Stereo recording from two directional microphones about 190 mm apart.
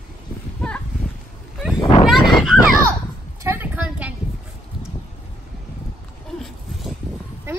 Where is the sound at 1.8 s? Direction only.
25° left (ahead or behind).